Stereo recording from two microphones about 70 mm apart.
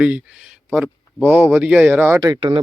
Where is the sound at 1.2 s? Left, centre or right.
Right.